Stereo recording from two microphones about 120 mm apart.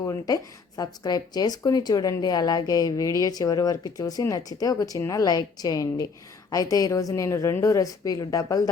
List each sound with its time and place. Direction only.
0.0 s a woman's voice: 30° left (ahead or behind)